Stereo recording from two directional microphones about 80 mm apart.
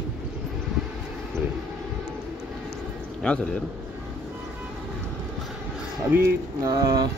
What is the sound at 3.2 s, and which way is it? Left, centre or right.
Speech, centre.